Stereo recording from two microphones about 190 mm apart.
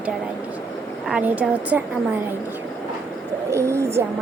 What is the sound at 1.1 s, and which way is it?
Speech, 10° right (ahead or behind).